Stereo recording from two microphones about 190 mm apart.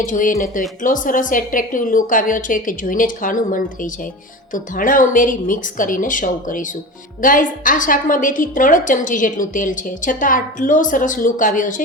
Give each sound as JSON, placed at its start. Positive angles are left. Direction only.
{"t": 0.0, "sound": "a woman's voice", "side_deg": 45}